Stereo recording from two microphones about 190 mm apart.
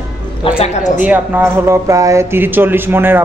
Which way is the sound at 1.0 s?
10° right (ahead or behind).